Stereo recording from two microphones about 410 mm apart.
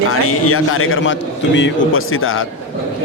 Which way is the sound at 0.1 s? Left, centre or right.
Left.